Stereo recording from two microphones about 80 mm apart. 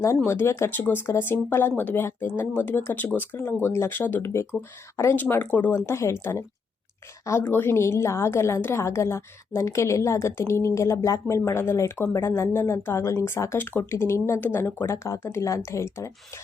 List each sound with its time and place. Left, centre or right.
0.3 s a woman's voice: left
7.5 s a woman's voice: left
13.6 s a woman's voice: left